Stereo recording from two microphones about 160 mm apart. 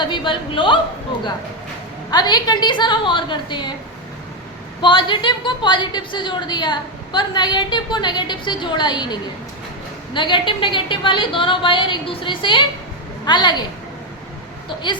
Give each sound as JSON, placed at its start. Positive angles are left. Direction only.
{"t": 0.0, "sound": "a woman's voice", "side_deg": 30}
{"t": 2.0, "sound": "a woman's voice", "side_deg": 25}
{"t": 4.8, "sound": "a woman's voice", "side_deg": 30}
{"t": 10.2, "sound": "a woman's voice", "side_deg": 30}